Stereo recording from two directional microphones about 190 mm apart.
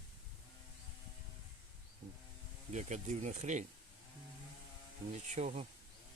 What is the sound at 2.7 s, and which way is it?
Speech, 40° right (ahead or behind).